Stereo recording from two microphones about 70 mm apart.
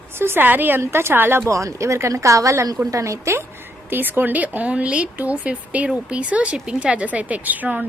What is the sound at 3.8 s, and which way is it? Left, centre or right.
A woman's voice, right.